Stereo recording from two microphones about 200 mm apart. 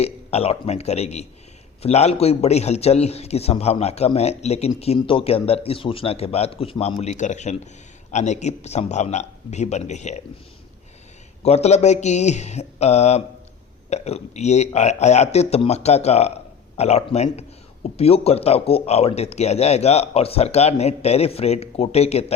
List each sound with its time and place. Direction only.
0.0 s a man's voice: 30° left (ahead or behind)
11.4 s a man's voice: 30° left (ahead or behind)